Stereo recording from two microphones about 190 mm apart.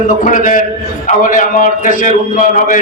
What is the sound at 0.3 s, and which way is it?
A man's voice, 45° left (ahead or behind).